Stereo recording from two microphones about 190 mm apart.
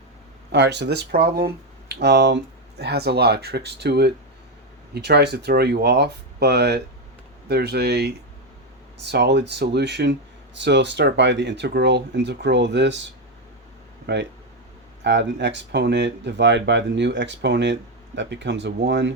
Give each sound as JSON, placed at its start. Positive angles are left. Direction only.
{"t": 0.5, "sound": "speech", "side_deg": -65}
{"t": 14.1, "sound": "speech", "side_deg": -60}